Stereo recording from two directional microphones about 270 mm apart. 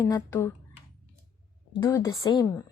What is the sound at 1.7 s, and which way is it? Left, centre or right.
Speech, centre.